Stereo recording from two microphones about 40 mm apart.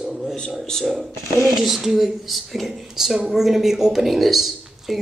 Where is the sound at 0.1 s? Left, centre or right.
Centre.